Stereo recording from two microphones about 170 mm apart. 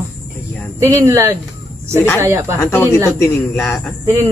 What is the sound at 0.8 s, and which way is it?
A man's voice, 15° right (ahead or behind).